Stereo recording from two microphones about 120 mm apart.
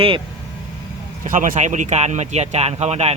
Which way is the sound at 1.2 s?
90° right.